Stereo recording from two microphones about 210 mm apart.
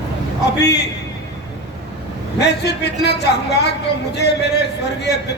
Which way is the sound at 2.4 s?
55° left (ahead or behind).